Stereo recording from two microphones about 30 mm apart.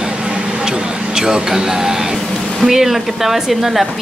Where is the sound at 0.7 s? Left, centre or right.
Right.